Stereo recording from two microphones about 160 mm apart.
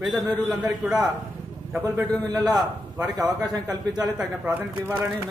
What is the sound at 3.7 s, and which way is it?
Speech, 25° right (ahead or behind).